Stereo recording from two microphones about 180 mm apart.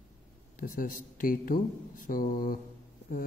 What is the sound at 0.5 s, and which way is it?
A man's voice, 50° left (ahead or behind).